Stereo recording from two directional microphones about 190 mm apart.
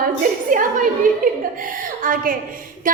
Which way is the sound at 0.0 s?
45° right (ahead or behind).